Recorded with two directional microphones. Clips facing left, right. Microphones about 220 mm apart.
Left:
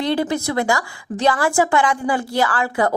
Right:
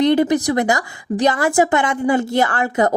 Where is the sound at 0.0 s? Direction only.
20° right (ahead or behind).